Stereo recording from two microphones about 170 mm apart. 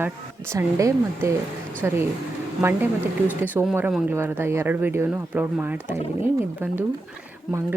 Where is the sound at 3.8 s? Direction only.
10° right (ahead or behind).